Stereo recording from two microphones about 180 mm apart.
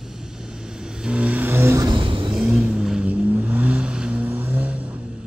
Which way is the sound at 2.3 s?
5° right (ahead or behind).